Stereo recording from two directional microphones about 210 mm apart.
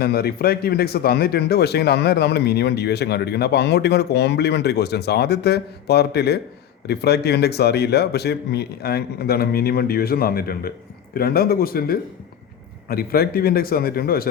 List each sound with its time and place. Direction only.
0.0 s speech: 45° left (ahead or behind)